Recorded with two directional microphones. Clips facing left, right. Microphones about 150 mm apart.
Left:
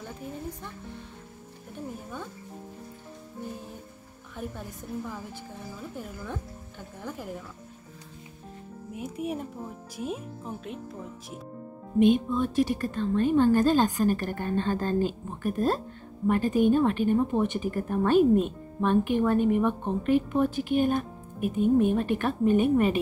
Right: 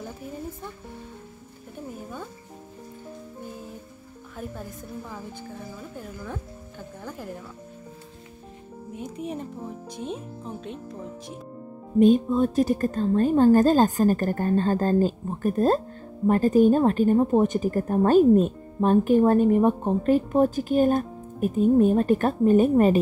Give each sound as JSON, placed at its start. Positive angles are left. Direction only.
{"t": 5.9, "sound": "speech", "side_deg": 0}
{"t": 8.9, "sound": "speech", "side_deg": 5}
{"t": 12.0, "sound": "a woman's voice", "side_deg": -40}